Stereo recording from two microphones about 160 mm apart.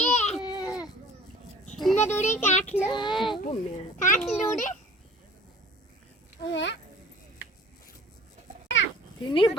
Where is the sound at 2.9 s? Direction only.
30° left (ahead or behind).